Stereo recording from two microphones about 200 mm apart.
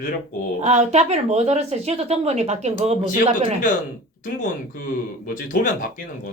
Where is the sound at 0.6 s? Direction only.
35° right (ahead or behind).